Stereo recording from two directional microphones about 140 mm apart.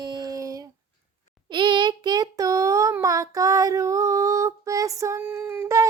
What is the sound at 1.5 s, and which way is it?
Child singing, 35° right (ahead or behind).